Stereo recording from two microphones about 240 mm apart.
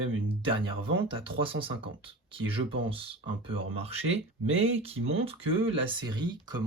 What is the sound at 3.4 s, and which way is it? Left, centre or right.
Speech, right.